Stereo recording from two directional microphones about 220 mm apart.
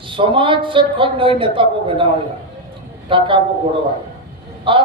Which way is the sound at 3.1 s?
25° right (ahead or behind).